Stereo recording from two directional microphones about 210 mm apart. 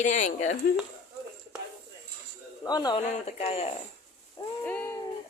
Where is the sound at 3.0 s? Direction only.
30° left (ahead or behind).